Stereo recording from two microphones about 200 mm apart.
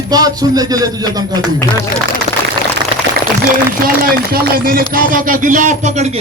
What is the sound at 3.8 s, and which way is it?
Speech, 50° right (ahead or behind).